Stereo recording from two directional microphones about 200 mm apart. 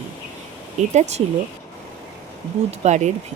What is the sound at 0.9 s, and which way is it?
Speech, 35° right (ahead or behind).